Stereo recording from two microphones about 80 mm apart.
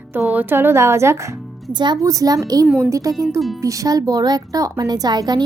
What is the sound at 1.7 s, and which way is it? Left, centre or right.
Speech, right.